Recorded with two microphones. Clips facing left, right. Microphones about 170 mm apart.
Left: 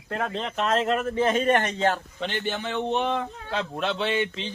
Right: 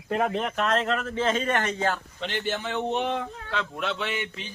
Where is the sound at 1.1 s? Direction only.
15° left (ahead or behind).